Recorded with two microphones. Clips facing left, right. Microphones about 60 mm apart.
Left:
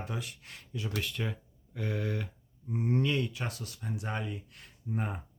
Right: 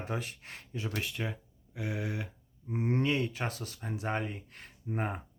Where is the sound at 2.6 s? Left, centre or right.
Right.